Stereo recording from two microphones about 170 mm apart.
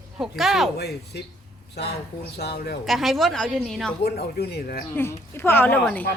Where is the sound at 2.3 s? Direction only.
70° left (ahead or behind).